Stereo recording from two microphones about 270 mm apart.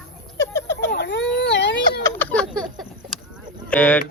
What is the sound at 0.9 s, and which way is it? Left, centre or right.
Baby cry, left.